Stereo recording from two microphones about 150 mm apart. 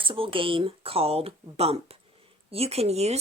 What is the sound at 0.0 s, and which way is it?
Speech, 35° right (ahead or behind).